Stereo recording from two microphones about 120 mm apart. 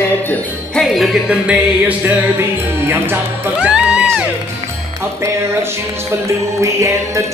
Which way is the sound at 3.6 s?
10° right (ahead or behind).